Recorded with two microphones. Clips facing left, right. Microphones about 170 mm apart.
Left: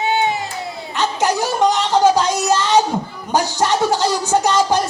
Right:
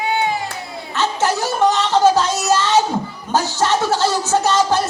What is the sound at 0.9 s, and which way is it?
Music, 15° left (ahead or behind).